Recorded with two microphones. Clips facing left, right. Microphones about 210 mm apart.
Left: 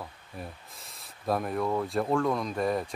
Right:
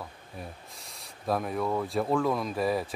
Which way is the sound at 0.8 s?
Centre (ahead or behind).